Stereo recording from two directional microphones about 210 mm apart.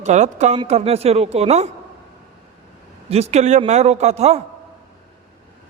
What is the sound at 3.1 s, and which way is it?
A man's voice, 30° right (ahead or behind).